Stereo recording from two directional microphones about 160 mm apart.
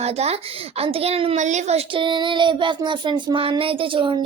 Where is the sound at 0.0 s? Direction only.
40° right (ahead or behind).